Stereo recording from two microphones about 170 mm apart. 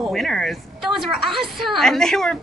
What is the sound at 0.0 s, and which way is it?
A woman's voice, centre (ahead or behind).